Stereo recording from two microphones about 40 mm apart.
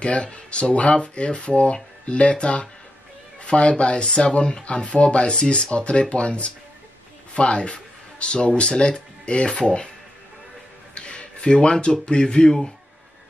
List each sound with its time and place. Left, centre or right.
0.0 s speech: left
11.0 s a sound: left
11.5 s speech: left